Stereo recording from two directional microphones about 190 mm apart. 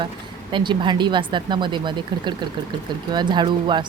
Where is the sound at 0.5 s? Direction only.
25° right (ahead or behind).